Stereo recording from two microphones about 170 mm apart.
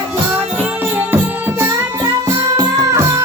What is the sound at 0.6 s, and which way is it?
Music, 10° right (ahead or behind).